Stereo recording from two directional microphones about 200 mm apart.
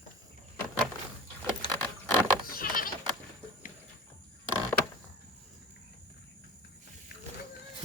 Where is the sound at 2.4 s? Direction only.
45° left (ahead or behind).